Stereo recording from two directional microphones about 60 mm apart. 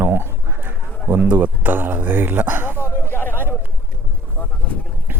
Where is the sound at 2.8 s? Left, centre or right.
Left.